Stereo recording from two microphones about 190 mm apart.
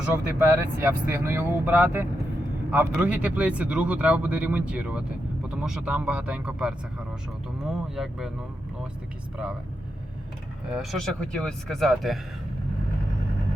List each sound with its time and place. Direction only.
0.6 s speech: 10° right (ahead or behind)
10.7 s speech: centre (ahead or behind)